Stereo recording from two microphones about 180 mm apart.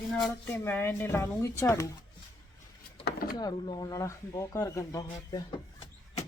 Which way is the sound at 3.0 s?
55° left (ahead or behind).